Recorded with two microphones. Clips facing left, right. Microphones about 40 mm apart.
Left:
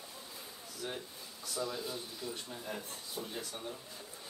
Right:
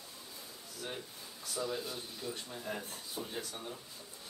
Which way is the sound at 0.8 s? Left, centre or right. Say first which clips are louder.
Left 2 dB; centre.